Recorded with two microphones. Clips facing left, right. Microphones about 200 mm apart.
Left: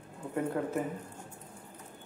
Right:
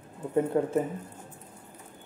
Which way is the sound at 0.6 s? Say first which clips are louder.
Right 7 dB; 25° right (ahead or behind).